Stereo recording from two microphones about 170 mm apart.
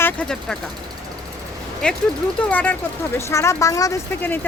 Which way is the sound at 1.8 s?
5° left (ahead or behind).